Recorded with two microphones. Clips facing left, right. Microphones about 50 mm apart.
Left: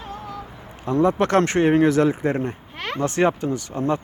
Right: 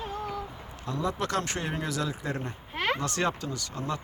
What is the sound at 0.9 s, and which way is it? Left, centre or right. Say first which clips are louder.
Speech: left 11 dB; left.